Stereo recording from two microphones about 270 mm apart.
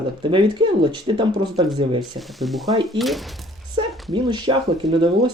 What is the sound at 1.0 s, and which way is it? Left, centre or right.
Speech, centre.